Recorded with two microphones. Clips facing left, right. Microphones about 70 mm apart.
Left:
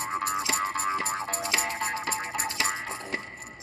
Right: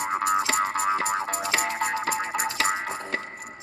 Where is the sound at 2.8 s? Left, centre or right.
Right.